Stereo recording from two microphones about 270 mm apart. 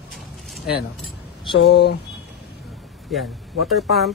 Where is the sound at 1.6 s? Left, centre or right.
Left.